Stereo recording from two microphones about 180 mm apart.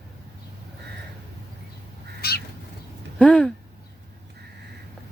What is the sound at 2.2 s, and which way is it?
Bird, 60° left (ahead or behind).